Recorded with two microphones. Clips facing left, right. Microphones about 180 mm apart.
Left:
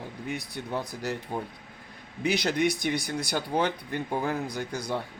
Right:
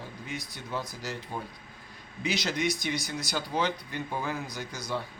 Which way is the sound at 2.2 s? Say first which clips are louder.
Left 4 dB; 55° left (ahead or behind).